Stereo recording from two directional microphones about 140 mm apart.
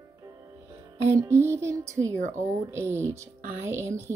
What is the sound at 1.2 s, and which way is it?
A woman's voice, 20° right (ahead or behind).